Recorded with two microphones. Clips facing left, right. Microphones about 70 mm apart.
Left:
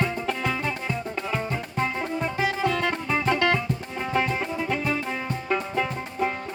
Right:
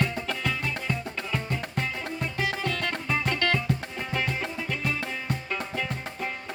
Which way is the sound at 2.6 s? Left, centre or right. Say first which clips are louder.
Left 5 dB; centre.